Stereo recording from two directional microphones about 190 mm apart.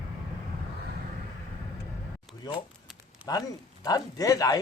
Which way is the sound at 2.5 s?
20° left (ahead or behind).